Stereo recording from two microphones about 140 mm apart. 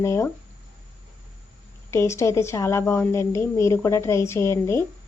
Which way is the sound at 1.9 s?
20° left (ahead or behind).